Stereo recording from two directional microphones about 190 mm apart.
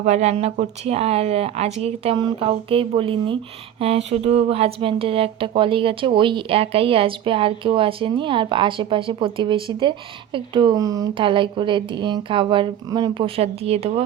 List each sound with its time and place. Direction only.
0.0 s speech: 35° right (ahead or behind)